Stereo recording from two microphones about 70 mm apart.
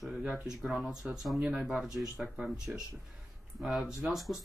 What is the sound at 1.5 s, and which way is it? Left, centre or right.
Speech, centre.